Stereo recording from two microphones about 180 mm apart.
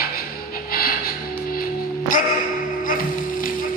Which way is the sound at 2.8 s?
50° left (ahead or behind).